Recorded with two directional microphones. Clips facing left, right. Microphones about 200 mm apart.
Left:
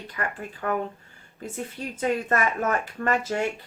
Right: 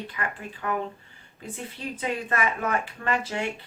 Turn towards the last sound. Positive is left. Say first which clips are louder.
# left 3 dB
turn(degrees=45)  # may be behind; listen again after turning